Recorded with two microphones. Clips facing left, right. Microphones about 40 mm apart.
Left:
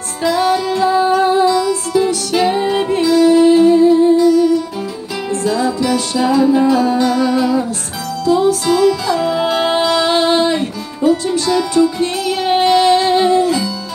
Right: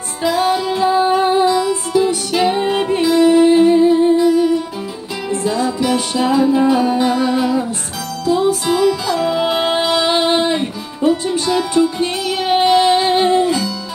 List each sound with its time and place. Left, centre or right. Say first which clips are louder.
0.2 s music: left 1 dB; centre
2.3 s music: left 2 dB; centre
2.6 s music: left 1 dB; centre
9.0 s music: left 1 dB; centre; by 13.6 s right